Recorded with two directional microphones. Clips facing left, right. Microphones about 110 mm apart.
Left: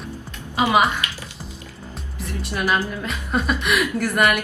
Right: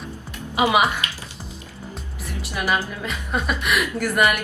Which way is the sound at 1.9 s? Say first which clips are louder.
Left 4 dB; 5° right (ahead or behind).